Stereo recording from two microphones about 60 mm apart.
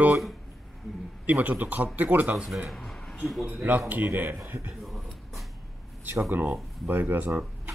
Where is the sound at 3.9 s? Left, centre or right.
Right.